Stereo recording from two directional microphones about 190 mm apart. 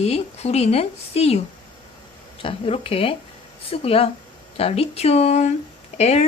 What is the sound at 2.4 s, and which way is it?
A woman's voice, 30° left (ahead or behind).